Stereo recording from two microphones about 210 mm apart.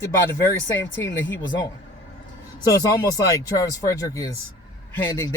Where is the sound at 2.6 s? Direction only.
15° left (ahead or behind).